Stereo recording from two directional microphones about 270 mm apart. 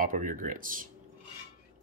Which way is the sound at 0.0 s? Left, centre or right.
Right.